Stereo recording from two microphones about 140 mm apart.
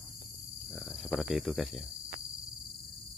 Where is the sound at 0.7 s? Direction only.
Centre (ahead or behind).